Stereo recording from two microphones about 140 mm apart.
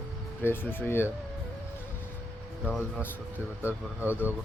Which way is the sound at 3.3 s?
10° right (ahead or behind).